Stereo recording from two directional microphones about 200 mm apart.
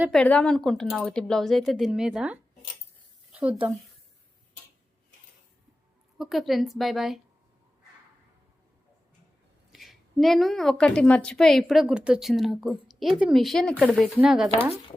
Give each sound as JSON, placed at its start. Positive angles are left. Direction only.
{"t": 0.1, "sound": "a woman's voice", "side_deg": 5}
{"t": 6.1, "sound": "a woman's voice", "side_deg": 0}
{"t": 9.7, "sound": "a woman's voice", "side_deg": 0}